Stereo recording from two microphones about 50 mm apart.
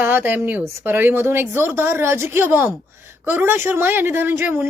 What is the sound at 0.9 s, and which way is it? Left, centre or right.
A woman's voice, right.